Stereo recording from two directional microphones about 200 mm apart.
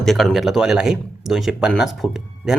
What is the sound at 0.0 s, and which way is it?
Speech, centre (ahead or behind).